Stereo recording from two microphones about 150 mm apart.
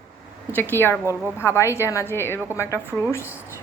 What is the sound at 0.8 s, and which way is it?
A woman's voice, 15° left (ahead or behind).